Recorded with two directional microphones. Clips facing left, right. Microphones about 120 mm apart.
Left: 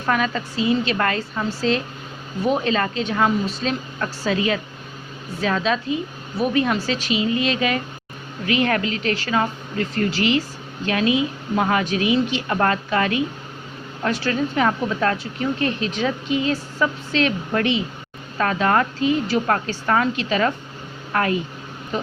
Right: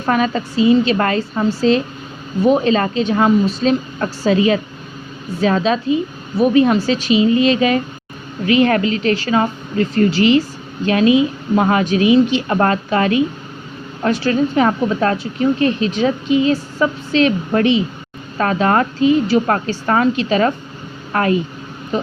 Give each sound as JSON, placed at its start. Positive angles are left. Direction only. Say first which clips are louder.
{"t": 0.0, "sound": "a woman's voice", "louder": "right 5 dB", "side_deg": -30}